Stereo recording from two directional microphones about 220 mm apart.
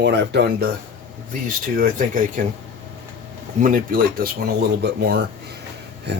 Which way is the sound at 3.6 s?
35° right (ahead or behind).